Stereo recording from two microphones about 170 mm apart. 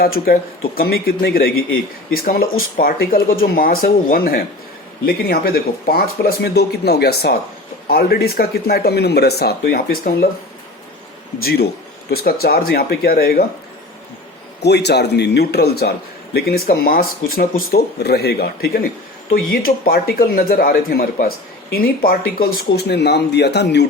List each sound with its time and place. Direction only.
0.0 s speech: 60° left (ahead or behind)
11.4 s speech: 70° left (ahead or behind)
14.6 s speech: 80° left